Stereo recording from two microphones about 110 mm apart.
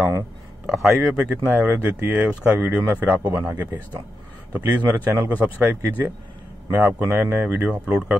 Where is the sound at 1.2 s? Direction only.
15° right (ahead or behind).